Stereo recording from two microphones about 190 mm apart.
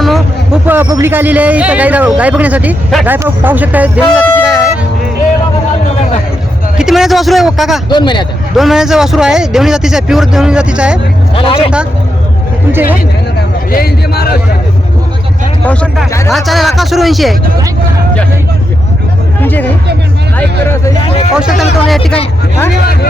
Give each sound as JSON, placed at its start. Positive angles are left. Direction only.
{"t": 0.0, "sound": "vehicle", "side_deg": 0}
{"t": 0.7, "sound": "a man's voice", "side_deg": -15}
{"t": 4.4, "sound": "vehicle", "side_deg": -5}
{"t": 6.7, "sound": "speech", "side_deg": 0}
{"t": 7.9, "sound": "speech", "side_deg": 25}
{"t": 8.5, "sound": "a man's voice", "side_deg": 0}
{"t": 11.3, "sound": "speech", "side_deg": 30}
{"t": 13.7, "sound": "a man's voice", "side_deg": 55}
{"t": 15.6, "sound": "a man's voice", "side_deg": 5}
{"t": 19.4, "sound": "music", "side_deg": 10}
{"t": 21.3, "sound": "a man's voice", "side_deg": -5}